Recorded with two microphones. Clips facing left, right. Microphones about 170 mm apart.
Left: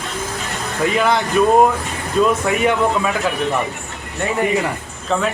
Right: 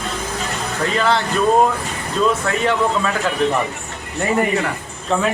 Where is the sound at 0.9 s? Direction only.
15° left (ahead or behind).